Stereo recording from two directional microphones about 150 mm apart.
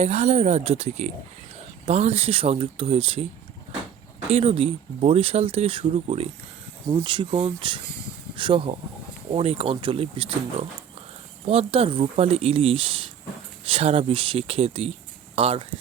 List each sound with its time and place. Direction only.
0.0 s speech: 50° right (ahead or behind)
4.3 s speech: 45° right (ahead or behind)